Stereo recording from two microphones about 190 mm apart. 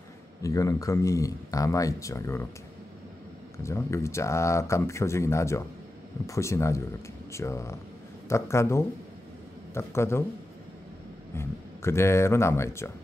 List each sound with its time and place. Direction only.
0.4 s speech: 15° left (ahead or behind)
3.6 s speech: 15° left (ahead or behind)
11.3 s speech: 15° left (ahead or behind)